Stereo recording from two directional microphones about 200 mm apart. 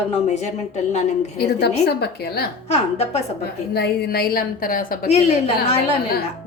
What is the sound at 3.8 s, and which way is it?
A woman's voice, 55° left (ahead or behind).